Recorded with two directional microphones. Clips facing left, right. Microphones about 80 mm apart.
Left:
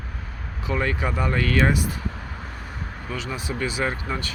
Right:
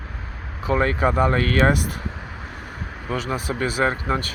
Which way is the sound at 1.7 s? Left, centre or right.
Right.